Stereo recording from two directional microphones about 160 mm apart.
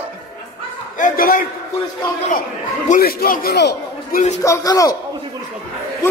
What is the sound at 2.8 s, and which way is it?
A man's voice, 65° left (ahead or behind).